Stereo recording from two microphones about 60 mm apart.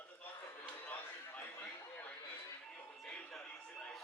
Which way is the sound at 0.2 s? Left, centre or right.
Left.